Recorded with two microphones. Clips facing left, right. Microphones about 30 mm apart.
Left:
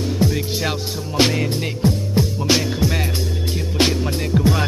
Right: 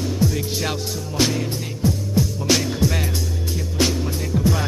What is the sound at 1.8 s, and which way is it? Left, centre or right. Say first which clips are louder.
Music: left 1 dB; left.